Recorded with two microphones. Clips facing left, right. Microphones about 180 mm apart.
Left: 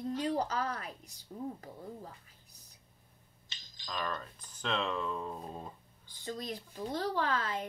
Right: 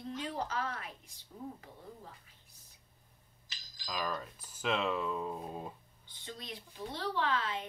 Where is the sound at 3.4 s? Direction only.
25° left (ahead or behind).